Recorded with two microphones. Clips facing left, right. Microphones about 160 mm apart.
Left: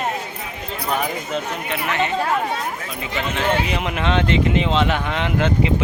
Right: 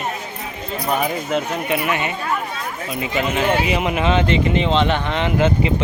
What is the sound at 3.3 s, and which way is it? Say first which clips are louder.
Speech: right 1 dB; 5° right (ahead or behind).